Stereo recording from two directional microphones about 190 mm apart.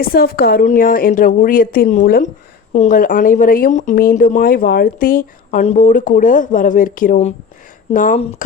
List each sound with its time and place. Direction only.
0.0 s speech: 50° left (ahead or behind)